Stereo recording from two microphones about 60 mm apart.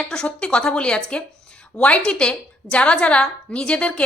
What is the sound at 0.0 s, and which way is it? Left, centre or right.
A woman's voice, centre.